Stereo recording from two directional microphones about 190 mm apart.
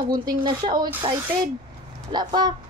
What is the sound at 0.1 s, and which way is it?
Speech, 20° right (ahead or behind).